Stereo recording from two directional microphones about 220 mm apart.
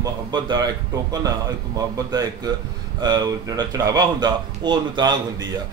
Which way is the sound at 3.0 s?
20° right (ahead or behind).